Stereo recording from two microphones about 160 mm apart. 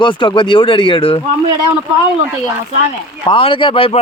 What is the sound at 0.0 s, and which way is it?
Speech, 30° left (ahead or behind).